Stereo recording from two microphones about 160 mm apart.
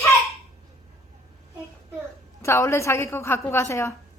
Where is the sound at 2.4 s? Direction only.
20° left (ahead or behind).